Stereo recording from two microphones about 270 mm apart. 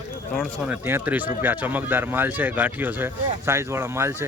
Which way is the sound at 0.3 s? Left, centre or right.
Centre.